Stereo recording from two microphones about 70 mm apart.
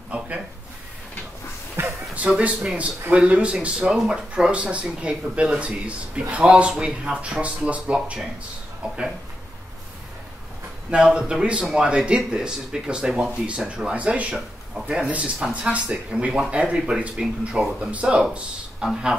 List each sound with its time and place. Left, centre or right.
1.8 s a sound: right
2.1 s speech: centre
10.9 s speech: centre